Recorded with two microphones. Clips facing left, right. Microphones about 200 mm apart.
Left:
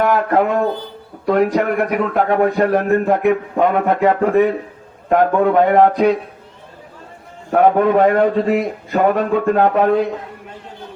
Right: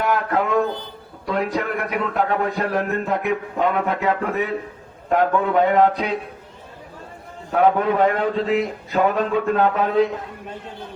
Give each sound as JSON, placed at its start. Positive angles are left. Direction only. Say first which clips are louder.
{"t": 0.0, "sound": "a man's voice", "louder": "left 6 dB", "side_deg": 50}
{"t": 7.5, "sound": "a man's voice", "louder": "left 5 dB", "side_deg": 50}